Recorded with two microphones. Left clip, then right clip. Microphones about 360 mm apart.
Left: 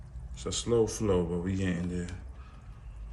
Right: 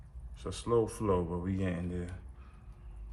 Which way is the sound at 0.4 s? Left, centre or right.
Centre.